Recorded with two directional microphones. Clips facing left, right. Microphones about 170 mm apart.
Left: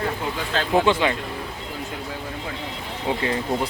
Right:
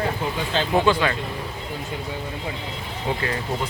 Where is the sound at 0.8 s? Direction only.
20° left (ahead or behind).